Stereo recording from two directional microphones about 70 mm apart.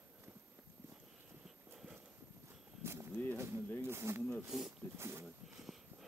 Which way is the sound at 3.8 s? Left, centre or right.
Right.